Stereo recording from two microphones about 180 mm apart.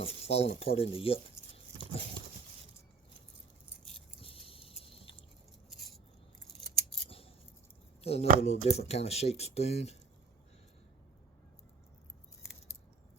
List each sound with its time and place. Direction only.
0.0 s speech: 35° left (ahead or behind)
4.2 s a sound: 30° left (ahead or behind)
7.1 s scissors: 30° left (ahead or behind)
8.0 s speech: 35° left (ahead or behind)